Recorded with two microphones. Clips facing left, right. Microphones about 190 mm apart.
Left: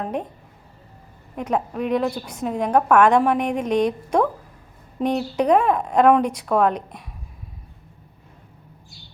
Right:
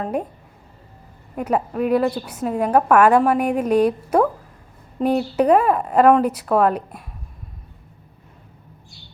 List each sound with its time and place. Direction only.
0.0 s a woman's voice: 10° right (ahead or behind)
1.4 s a woman's voice: 5° right (ahead or behind)